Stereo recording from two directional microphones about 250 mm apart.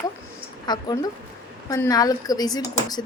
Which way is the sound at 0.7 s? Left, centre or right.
Centre.